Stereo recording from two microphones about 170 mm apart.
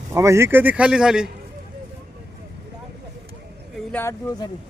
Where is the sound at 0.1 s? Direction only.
15° right (ahead or behind).